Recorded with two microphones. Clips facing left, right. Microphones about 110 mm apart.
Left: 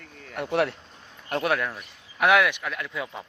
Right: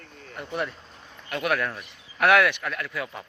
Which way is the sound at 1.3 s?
40° left (ahead or behind).